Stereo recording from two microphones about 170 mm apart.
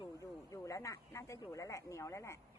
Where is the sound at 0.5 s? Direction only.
20° left (ahead or behind).